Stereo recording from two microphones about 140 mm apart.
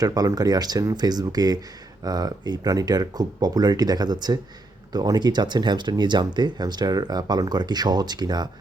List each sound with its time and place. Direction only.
0.0 s speech: 25° right (ahead or behind)